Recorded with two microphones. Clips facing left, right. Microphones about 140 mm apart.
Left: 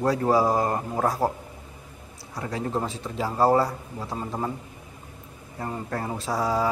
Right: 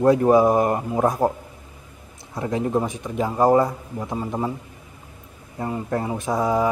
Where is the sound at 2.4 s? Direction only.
20° right (ahead or behind).